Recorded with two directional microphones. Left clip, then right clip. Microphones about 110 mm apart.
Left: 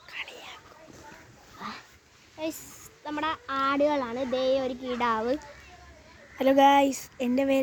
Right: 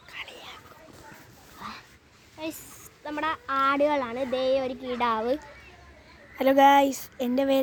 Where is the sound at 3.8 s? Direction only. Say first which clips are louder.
Right 1 dB; 20° left (ahead or behind).